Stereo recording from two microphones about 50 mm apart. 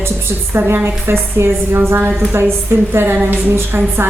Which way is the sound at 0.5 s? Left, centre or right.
Right.